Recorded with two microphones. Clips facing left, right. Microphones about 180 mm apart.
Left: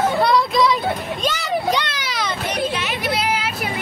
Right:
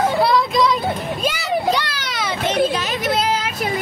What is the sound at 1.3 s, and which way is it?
Children playing, 5° right (ahead or behind).